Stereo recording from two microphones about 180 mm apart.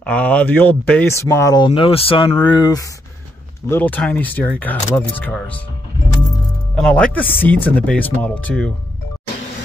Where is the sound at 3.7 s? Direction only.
10° left (ahead or behind).